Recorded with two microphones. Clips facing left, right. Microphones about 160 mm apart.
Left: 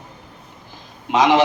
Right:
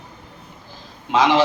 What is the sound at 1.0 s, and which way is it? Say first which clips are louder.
Speech: left 1 dB; 20° left (ahead or behind).